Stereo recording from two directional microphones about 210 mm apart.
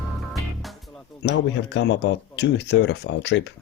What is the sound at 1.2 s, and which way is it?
Speech, 55° left (ahead or behind).